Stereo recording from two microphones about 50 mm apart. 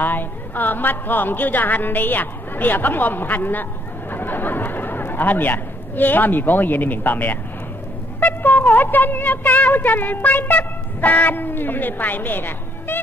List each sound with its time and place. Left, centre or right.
0.0 s a woman's voice: left